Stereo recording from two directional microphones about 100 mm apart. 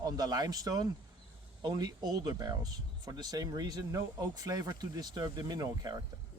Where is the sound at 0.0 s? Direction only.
40° right (ahead or behind).